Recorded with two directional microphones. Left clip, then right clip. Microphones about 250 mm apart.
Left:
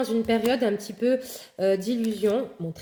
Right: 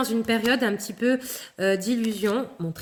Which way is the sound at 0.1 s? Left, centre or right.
Right.